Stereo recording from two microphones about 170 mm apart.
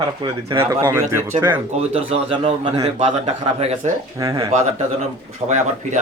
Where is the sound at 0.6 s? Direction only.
15° right (ahead or behind).